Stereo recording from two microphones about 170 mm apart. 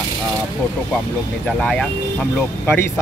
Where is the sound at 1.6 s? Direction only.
5° left (ahead or behind).